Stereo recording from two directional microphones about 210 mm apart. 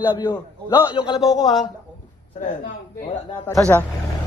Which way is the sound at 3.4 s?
5° left (ahead or behind).